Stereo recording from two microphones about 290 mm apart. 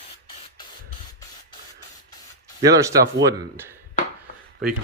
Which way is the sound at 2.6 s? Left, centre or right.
Centre.